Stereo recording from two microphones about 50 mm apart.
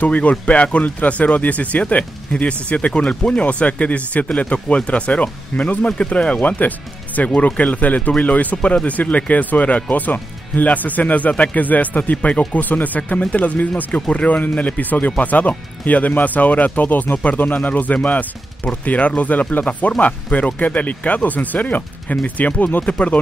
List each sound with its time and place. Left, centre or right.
0.0 s speech: left